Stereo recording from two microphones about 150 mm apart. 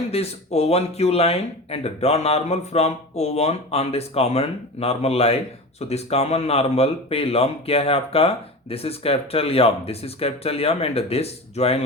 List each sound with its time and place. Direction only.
0.1 s speech: 45° left (ahead or behind)